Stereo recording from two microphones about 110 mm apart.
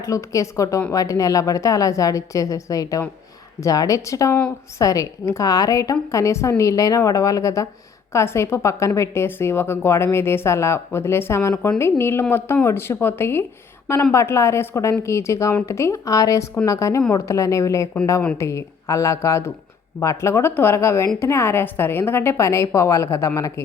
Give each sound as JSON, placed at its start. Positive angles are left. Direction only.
{"t": 0.0, "sound": "a woman's voice", "side_deg": 30}